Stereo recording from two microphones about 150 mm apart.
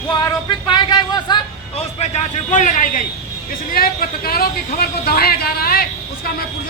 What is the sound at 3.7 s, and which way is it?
Speech, 80° left.